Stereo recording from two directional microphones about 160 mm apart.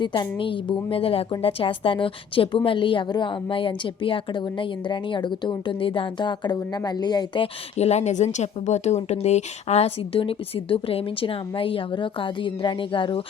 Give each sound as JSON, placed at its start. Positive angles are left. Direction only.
{"t": 0.0, "sound": "a woman's voice", "side_deg": 30}